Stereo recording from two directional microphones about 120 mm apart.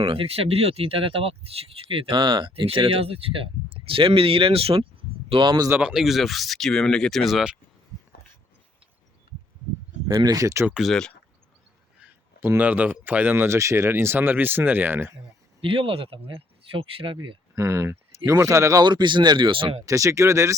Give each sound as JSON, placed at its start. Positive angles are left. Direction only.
{"t": 0.1, "sound": "speech", "side_deg": -55}
{"t": 5.3, "sound": "speech", "side_deg": -40}
{"t": 5.8, "sound": "speech", "side_deg": -5}
{"t": 10.2, "sound": "speech", "side_deg": -30}
{"t": 10.7, "sound": "speech", "side_deg": -5}
{"t": 12.4, "sound": "speech", "side_deg": -15}
{"t": 15.6, "sound": "speech", "side_deg": -50}
{"t": 17.5, "sound": "speech", "side_deg": -25}
{"t": 18.9, "sound": "speech", "side_deg": -40}
{"t": 19.8, "sound": "speech", "side_deg": -25}